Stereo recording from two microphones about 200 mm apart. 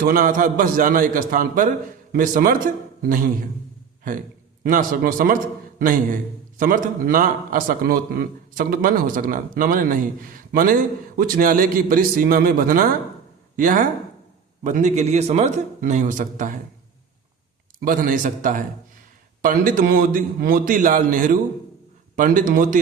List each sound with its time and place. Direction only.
0.0 s a man's voice: 45° right (ahead or behind)
4.6 s a man's voice: 40° right (ahead or behind)
17.7 s a man's voice: 45° right (ahead or behind)